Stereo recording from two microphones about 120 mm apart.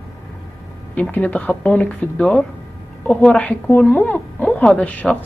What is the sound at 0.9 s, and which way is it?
Speech, 10° left (ahead or behind).